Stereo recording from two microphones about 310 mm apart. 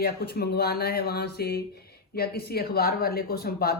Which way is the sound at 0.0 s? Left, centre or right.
Left.